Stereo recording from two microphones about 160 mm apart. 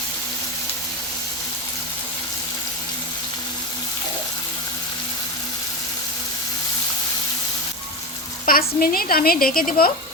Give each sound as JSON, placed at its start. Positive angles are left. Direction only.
{"t": 8.4, "sound": "a woman's voice", "side_deg": 65}